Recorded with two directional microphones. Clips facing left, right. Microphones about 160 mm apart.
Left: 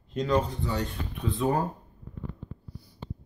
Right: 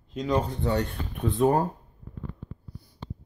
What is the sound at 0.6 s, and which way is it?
Speech, 60° right (ahead or behind).